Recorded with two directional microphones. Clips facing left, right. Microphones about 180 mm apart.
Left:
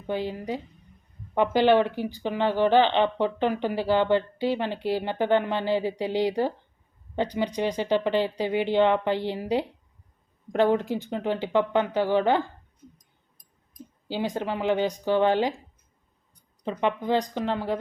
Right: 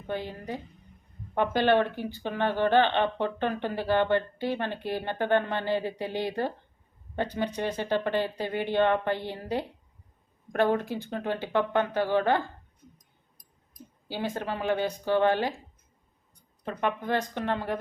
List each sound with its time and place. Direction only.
0.1 s speech: 15° left (ahead or behind)
13.7 s speech: 15° left (ahead or behind)
16.6 s speech: 15° left (ahead or behind)